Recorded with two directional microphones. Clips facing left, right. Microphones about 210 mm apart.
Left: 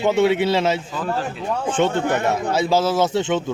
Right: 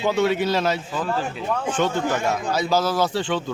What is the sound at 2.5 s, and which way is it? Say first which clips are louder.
Speech: left 3 dB; 25° left (ahead or behind).